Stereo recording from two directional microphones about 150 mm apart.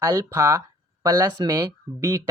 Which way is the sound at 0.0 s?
20° right (ahead or behind).